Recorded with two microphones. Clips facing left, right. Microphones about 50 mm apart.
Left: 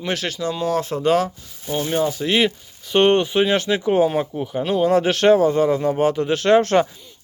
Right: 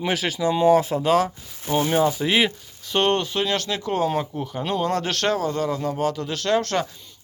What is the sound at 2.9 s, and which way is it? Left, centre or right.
Speech, centre.